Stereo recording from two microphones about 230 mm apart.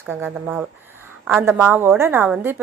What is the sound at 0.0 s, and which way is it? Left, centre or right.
A woman's voice, centre.